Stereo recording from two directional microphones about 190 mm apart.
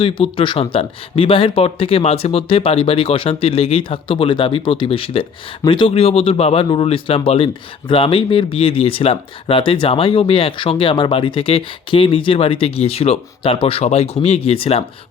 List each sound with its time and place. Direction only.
0.0 s speech: 25° left (ahead or behind)